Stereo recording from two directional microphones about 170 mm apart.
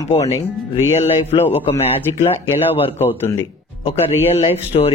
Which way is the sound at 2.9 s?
15° left (ahead or behind).